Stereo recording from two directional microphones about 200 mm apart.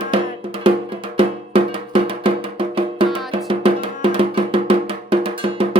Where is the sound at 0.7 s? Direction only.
25° right (ahead or behind).